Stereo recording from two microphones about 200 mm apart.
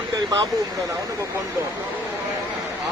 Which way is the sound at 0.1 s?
20° right (ahead or behind).